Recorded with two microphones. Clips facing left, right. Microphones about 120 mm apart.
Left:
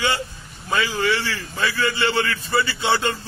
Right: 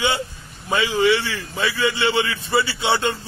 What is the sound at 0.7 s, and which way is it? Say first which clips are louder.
A man's voice: right 4 dB; 20° right (ahead or behind).